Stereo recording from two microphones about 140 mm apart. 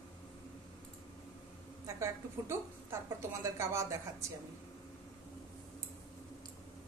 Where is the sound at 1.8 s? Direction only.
20° right (ahead or behind).